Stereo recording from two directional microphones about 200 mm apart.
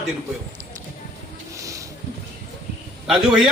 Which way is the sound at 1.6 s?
15° right (ahead or behind).